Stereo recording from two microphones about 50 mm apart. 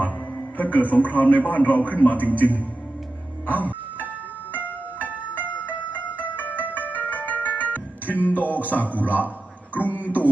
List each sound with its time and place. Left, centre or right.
0.0 s a man's voice: left
3.4 s music: left
8.4 s a man's voice: right
9.7 s a man's voice: left
10.0 s a man's voice: right